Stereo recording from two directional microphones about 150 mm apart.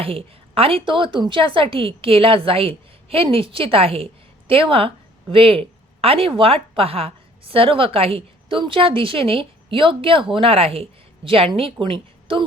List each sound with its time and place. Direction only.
0.0 s a woman's voice: 40° right (ahead or behind)